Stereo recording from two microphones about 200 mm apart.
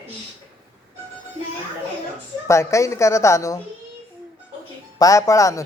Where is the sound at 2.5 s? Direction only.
15° left (ahead or behind).